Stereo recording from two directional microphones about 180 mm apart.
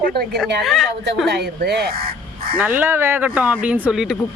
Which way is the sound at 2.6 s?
10° right (ahead or behind).